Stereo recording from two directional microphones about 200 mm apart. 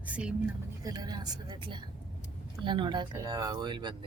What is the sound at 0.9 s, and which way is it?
Speech, 20° right (ahead or behind).